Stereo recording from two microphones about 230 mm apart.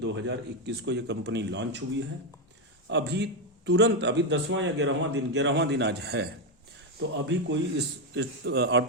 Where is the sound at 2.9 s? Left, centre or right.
Right.